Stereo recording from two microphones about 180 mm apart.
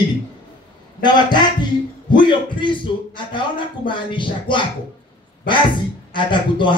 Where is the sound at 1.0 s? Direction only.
25° left (ahead or behind).